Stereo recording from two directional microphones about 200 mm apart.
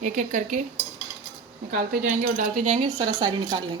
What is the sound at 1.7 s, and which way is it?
Speech, 45° right (ahead or behind).